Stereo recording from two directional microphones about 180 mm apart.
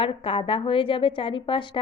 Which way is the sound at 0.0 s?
30° left (ahead or behind).